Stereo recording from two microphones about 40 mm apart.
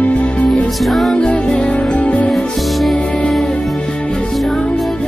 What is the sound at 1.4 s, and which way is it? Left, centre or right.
Music, centre.